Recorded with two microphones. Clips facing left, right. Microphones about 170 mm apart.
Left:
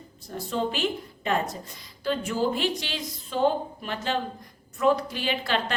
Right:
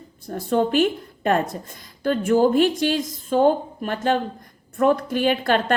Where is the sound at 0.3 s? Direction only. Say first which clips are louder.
Right 8 dB; 55° right (ahead or behind).